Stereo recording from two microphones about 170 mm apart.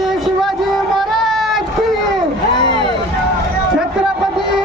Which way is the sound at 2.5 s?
25° left (ahead or behind).